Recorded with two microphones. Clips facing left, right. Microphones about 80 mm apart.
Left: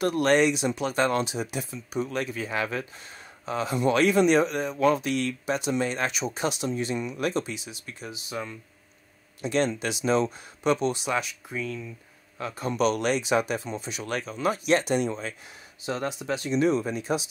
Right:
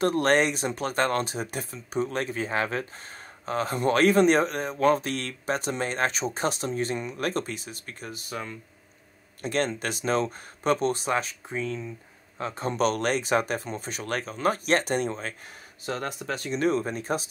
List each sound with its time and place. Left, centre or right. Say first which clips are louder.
0.0 s speech: left 1 dB; right